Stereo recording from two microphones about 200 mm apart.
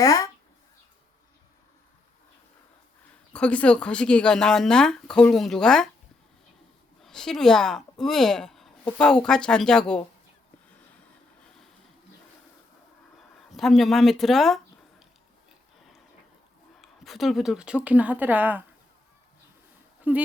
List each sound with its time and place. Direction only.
0.0 s speech: 15° left (ahead or behind)
3.3 s speech: 5° left (ahead or behind)
7.0 s speech: 5° left (ahead or behind)
13.6 s speech: centre (ahead or behind)
16.8 s speech: centre (ahead or behind)
20.1 s speech: 10° right (ahead or behind)